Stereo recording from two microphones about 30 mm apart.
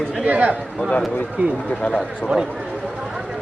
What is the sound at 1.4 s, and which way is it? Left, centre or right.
Speech, right.